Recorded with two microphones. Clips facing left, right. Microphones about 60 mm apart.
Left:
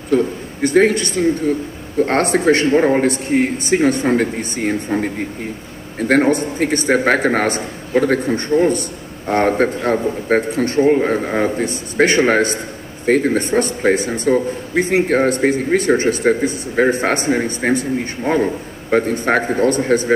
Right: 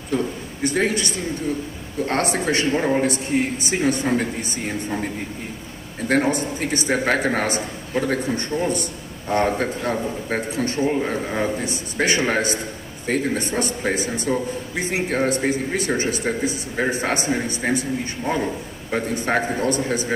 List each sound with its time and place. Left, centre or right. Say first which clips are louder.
0.6 s a man's voice: left 8 dB; left
8.3 s a man's voice: left 8 dB; left